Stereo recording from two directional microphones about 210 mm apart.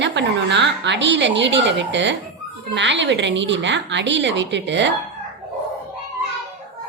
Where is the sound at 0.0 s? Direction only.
55° right (ahead or behind).